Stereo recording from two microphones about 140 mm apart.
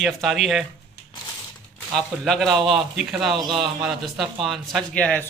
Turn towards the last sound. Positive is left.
turn(degrees=10)  # may be behind; listen again after turning